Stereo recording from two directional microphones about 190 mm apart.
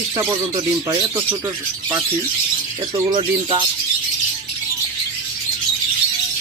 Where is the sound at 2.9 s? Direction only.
25° right (ahead or behind).